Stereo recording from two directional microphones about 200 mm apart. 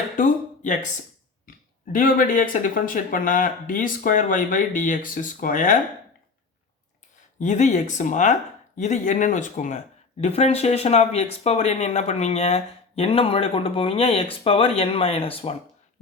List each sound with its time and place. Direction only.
0.2 s a sound: 40° left (ahead or behind)
1.5 s speech: 45° left (ahead or behind)
7.3 s speech: 35° left (ahead or behind)